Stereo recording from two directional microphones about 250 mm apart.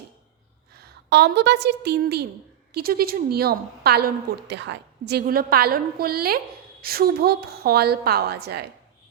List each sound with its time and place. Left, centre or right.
0.7 s a woman's voice: right